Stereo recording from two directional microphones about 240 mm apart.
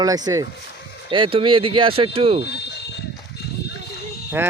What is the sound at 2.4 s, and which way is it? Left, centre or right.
Fire alarm, left.